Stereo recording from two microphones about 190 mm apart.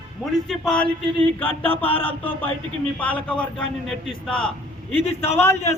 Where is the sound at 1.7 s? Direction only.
30° left (ahead or behind).